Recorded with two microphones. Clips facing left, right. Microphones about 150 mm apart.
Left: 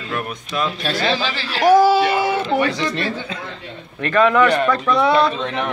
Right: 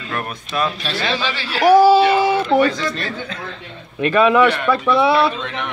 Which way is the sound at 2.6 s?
20° left (ahead or behind).